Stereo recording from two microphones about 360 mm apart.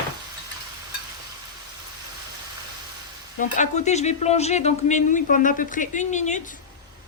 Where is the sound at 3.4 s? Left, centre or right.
Centre.